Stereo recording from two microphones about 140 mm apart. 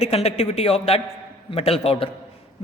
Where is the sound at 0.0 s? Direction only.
50° left (ahead or behind).